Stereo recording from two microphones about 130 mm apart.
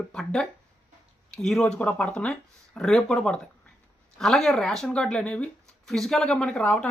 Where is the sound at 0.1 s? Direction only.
5° left (ahead or behind).